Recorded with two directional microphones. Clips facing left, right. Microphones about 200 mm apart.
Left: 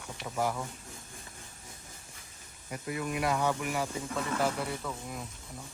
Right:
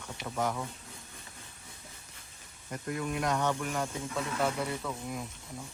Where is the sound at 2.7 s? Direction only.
5° left (ahead or behind).